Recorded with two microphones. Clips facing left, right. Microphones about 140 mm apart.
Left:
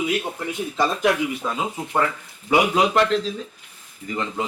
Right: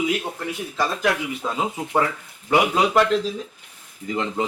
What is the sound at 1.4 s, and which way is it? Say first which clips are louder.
Speech: even; 10° right (ahead or behind).